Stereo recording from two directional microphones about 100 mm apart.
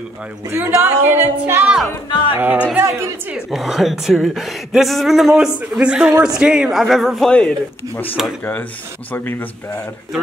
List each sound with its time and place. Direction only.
0.5 s a woman's voice: 25° right (ahead or behind)
3.4 s a woman's voice: 5° right (ahead or behind); by 9.5 s 20° left (ahead or behind)